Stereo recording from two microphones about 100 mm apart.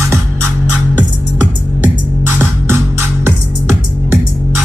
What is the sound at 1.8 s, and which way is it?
Music, 20° right (ahead or behind).